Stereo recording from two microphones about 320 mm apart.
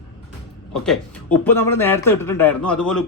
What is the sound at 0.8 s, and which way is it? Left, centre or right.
Speech, centre.